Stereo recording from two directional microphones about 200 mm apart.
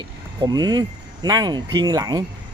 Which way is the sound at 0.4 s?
20° right (ahead or behind).